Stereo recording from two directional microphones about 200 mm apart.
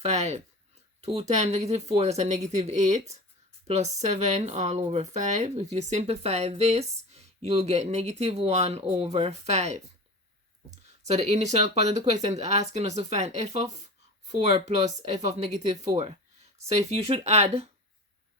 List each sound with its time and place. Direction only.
0.0 s speech: 35° right (ahead or behind)
11.0 s speech: 35° right (ahead or behind)
14.3 s speech: 25° right (ahead or behind)